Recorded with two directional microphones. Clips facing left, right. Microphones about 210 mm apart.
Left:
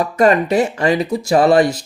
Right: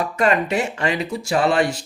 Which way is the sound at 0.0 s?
40° left (ahead or behind).